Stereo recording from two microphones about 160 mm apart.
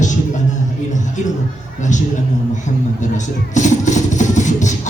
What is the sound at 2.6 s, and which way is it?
Speech, 50° left (ahead or behind).